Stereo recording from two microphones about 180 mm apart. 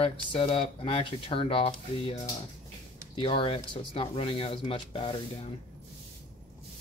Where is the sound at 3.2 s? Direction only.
30° left (ahead or behind).